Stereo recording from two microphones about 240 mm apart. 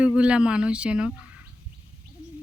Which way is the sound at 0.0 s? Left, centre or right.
Centre.